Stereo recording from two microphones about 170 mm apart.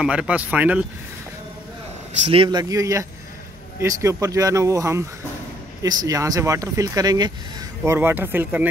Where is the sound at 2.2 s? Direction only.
30° right (ahead or behind).